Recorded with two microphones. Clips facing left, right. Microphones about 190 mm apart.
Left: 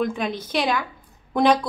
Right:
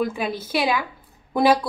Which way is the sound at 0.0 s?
5° right (ahead or behind).